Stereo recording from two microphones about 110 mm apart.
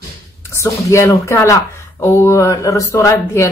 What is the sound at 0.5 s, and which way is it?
Speech, 25° left (ahead or behind).